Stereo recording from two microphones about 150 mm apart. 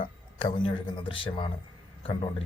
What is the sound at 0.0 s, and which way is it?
Speech, 35° left (ahead or behind).